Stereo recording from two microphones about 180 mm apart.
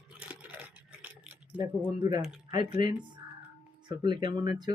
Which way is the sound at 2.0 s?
20° right (ahead or behind).